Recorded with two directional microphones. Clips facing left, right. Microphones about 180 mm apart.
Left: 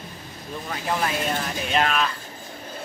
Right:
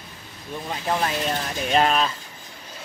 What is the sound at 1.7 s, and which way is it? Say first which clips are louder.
Speech: right 3 dB; 30° right (ahead or behind).